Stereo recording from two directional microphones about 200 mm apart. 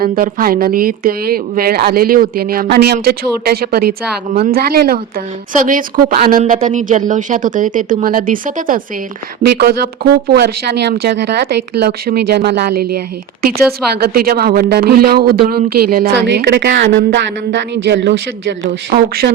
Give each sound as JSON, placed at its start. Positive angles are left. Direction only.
{"t": 0.0, "sound": "speech", "side_deg": -45}
{"t": 18.9, "sound": "speech", "side_deg": -45}